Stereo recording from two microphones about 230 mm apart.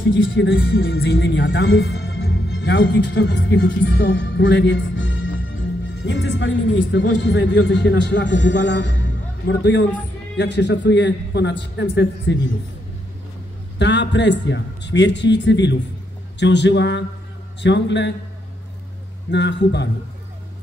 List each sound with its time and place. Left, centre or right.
0.0 s a man's voice: left
13.7 s a man's voice: left
19.3 s a man's voice: left